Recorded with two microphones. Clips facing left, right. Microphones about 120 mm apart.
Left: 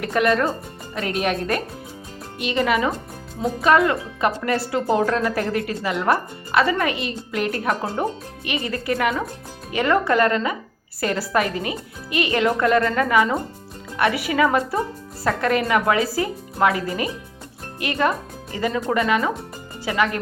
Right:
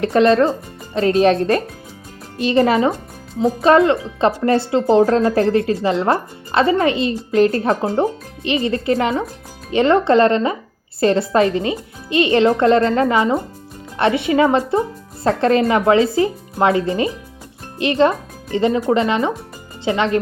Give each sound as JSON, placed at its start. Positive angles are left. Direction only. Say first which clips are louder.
{"t": 0.0, "sound": "speech", "louder": "right 6 dB", "side_deg": -30}